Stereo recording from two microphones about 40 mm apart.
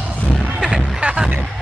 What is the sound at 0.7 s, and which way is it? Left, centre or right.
Music, right.